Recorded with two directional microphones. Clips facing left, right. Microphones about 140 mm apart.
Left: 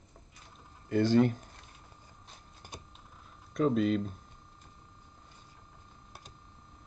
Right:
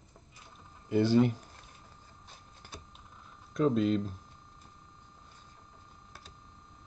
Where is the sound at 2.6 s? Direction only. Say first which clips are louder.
Left 1 dB; 15° left (ahead or behind).